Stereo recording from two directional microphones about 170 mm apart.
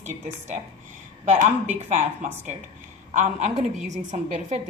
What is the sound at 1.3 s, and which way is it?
A woman's voice, 45° right (ahead or behind).